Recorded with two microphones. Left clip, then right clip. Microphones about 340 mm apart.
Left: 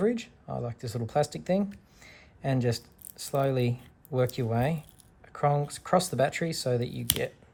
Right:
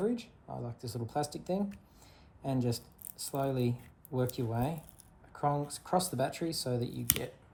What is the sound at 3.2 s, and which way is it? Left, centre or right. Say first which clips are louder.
Speech: left 6 dB; left.